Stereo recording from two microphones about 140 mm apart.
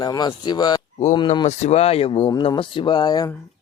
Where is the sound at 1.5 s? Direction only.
50° left (ahead or behind); by 3.3 s 30° left (ahead or behind).